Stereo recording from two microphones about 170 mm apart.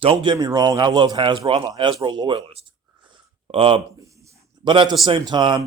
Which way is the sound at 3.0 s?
30° right (ahead or behind).